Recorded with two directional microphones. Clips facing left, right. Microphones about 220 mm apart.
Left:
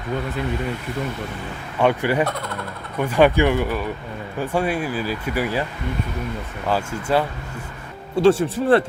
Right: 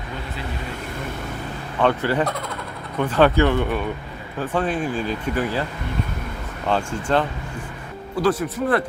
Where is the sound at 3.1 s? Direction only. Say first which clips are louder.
Left 1 dB; 15° left (ahead or behind).